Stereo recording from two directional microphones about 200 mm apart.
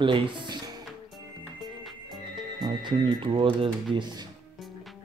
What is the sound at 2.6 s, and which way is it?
Speech, 20° right (ahead or behind).